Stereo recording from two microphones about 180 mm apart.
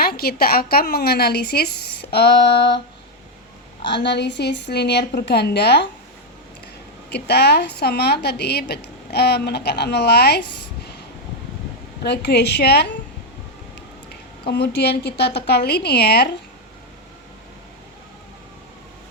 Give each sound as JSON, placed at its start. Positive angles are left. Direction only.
{"t": 0.0, "sound": "a woman's voice", "side_deg": 60}
{"t": 3.8, "sound": "a woman's voice", "side_deg": 70}
{"t": 7.1, "sound": "a woman's voice", "side_deg": 65}
{"t": 12.0, "sound": "a woman's voice", "side_deg": 70}
{"t": 14.4, "sound": "a woman's voice", "side_deg": 70}